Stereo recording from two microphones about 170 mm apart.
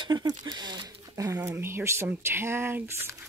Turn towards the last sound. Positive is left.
turn(degrees=-15)  # may be behind; listen again after turning